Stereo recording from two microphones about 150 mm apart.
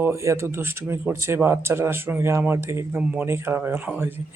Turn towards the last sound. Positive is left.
turn(degrees=-15)  # may be behind; listen again after turning